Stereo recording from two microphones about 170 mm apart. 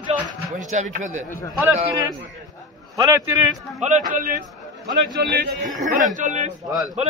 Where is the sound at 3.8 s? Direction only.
50° right (ahead or behind).